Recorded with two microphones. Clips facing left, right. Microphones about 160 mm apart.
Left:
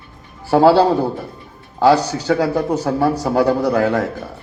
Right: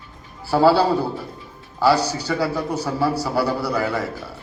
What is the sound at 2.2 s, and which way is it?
A man's voice, 50° left (ahead or behind).